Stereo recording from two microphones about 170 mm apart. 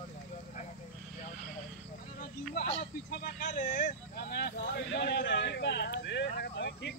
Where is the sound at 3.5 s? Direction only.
50° left (ahead or behind).